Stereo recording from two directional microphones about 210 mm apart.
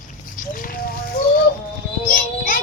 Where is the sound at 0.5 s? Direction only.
40° left (ahead or behind).